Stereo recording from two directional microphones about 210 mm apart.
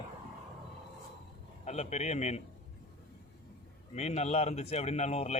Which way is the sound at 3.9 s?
30° left (ahead or behind).